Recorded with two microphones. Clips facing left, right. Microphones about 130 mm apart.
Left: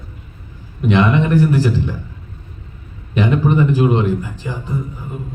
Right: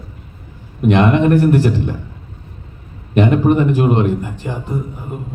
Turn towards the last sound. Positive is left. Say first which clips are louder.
# right 1 dB
turn(degrees=-55)  # may be behind; listen again after turning